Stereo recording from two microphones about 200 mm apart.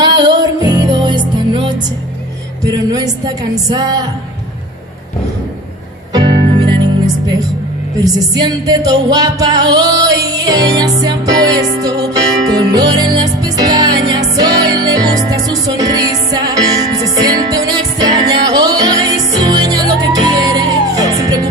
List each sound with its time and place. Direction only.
0.7 s music: 20° right (ahead or behind)
2.6 s speech: 20° right (ahead or behind)
6.1 s music: 20° right (ahead or behind)